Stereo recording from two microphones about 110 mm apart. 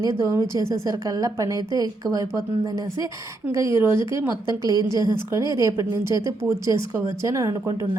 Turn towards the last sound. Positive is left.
turn(degrees=-30)  # may be behind; listen again after turning